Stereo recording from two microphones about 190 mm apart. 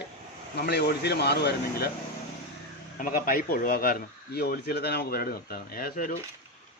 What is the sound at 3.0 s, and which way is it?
A man's voice, 45° left (ahead or behind).